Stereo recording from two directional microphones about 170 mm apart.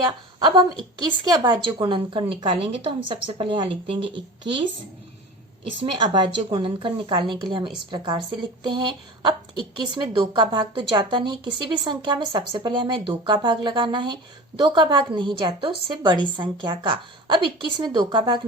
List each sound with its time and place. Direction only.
0.0 s a woman's voice: 25° right (ahead or behind)
5.8 s speech: 30° right (ahead or behind)